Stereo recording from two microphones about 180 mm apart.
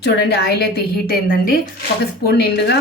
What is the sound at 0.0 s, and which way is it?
Speech, 65° left (ahead or behind).